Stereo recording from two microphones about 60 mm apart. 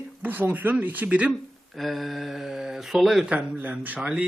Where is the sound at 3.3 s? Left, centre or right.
Right.